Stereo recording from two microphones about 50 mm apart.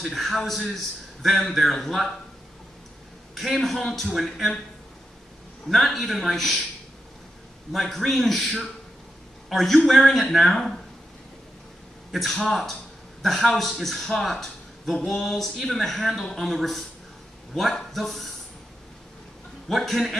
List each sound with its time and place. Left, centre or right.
0.0 s a man's voice: centre
3.3 s a man's voice: centre
5.7 s a man's voice: centre
7.7 s a man's voice: centre
9.8 s a man's voice: centre
12.1 s a man's voice: centre
19.7 s a man's voice: centre